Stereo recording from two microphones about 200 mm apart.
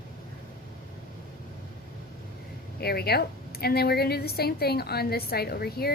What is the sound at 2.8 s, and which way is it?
A woman's voice, 50° left (ahead or behind).